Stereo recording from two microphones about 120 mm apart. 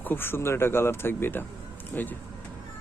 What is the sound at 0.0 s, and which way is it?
Speech, 15° left (ahead or behind).